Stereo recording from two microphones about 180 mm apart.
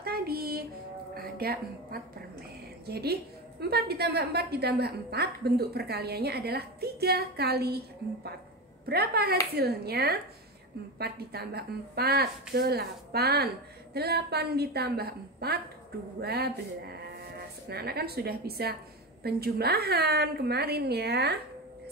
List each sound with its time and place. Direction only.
0.0 s child singing: 60° right (ahead or behind)
1.1 s music: 55° right (ahead or behind)
2.9 s a woman's voice: 60° right (ahead or behind)